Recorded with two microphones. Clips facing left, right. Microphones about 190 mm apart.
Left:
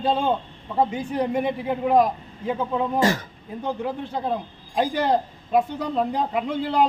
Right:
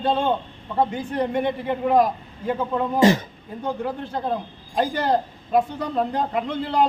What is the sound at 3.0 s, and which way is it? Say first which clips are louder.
Speech: right 6 dB; 20° right (ahead or behind).